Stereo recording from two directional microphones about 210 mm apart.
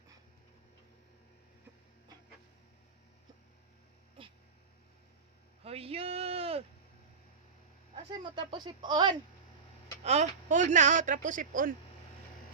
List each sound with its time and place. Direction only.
5.6 s a sound: 30° right (ahead or behind)
8.1 s speech: 20° right (ahead or behind)
10.0 s speech: 30° right (ahead or behind)